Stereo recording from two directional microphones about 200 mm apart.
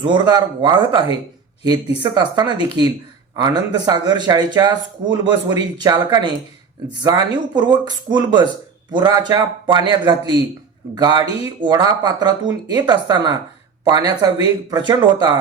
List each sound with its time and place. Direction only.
0.0 s speech: 20° right (ahead or behind)